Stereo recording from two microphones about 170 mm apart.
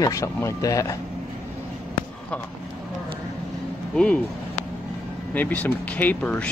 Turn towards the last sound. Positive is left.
turn(degrees=10)  # may be behind; listen again after turning